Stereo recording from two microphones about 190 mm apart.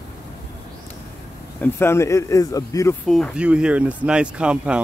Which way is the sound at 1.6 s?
15° left (ahead or behind).